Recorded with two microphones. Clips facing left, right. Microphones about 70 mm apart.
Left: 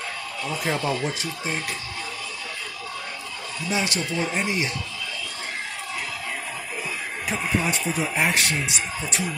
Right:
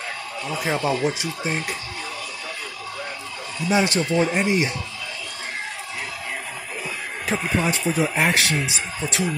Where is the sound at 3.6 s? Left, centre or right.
Right.